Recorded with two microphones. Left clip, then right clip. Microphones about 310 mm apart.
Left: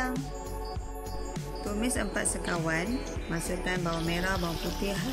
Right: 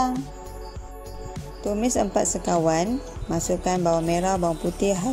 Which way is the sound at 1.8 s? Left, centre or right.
Centre.